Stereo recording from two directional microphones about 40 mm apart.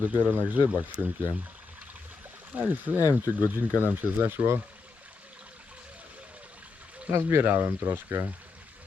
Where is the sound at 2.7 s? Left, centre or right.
Right.